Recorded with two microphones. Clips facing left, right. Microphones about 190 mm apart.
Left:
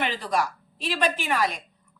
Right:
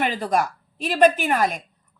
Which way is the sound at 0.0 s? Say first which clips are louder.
Right 4 dB; 45° right (ahead or behind).